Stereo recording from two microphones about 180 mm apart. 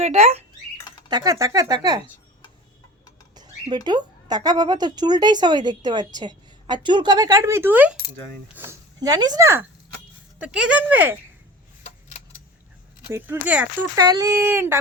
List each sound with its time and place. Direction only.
0.0 s speech: 35° right (ahead or behind)
1.0 s speech: 20° right (ahead or behind)
3.3 s a sound: 25° right (ahead or behind)
3.8 s speech: 25° right (ahead or behind)
11.8 s a sound: 35° left (ahead or behind)
13.1 s speech: 10° right (ahead or behind)
13.9 s speech: 20° right (ahead or behind)